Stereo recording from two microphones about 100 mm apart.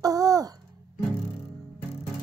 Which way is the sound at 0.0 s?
35° right (ahead or behind).